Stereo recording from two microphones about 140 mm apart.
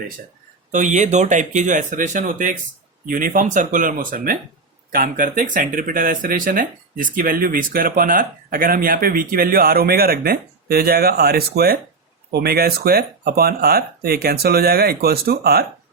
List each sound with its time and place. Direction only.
0.7 s speech: 60° right (ahead or behind); by 15.6 s 90° right